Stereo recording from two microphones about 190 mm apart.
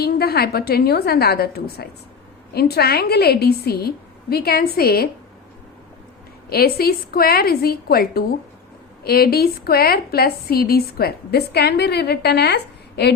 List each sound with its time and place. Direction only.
0.0 s a woman's voice: 55° left (ahead or behind)
6.5 s a woman's voice: 55° left (ahead or behind)